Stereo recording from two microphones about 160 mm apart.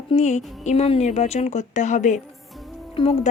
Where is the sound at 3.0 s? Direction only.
40° left (ahead or behind).